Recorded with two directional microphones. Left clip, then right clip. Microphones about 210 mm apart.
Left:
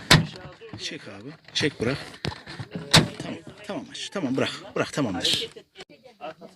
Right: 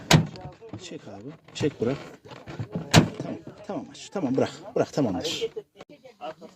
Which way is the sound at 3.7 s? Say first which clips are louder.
Left 2 dB; 5° right (ahead or behind).